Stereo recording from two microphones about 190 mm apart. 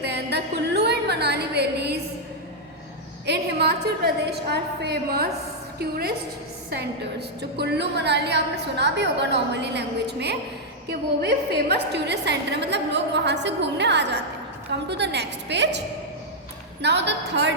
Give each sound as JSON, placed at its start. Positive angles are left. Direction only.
{"t": 0.3, "sound": "a sound", "side_deg": -60}
{"t": 3.2, "sound": "a woman's voice", "side_deg": -60}
{"t": 16.8, "sound": "a woman's voice", "side_deg": -65}